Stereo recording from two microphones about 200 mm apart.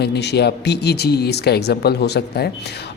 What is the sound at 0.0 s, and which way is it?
Speech, 55° left (ahead or behind).